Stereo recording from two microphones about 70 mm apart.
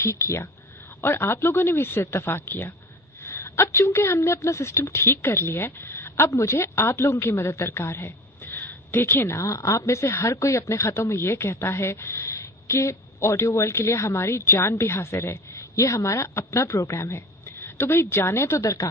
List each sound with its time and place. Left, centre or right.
1.0 s a woman's voice: left